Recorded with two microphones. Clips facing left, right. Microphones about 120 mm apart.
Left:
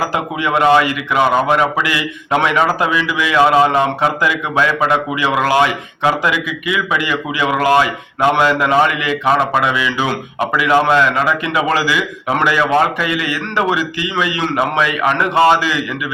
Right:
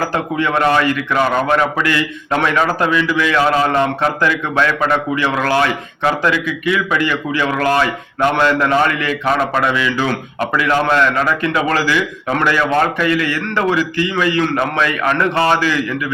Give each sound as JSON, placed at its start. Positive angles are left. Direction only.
{"t": 0.0, "sound": "a man's voice", "side_deg": 15}